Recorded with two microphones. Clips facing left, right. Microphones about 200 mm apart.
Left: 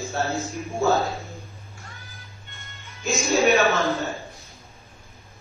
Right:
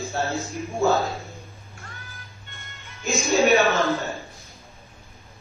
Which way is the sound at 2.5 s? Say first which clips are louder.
Right 1 dB; 50° right (ahead or behind).